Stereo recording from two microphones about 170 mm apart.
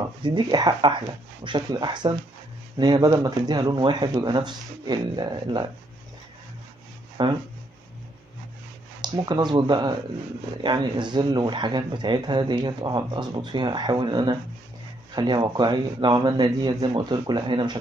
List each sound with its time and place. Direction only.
0.2 s speech: 25° right (ahead or behind)
7.2 s speech: 30° right (ahead or behind)
9.0 s speech: 25° right (ahead or behind)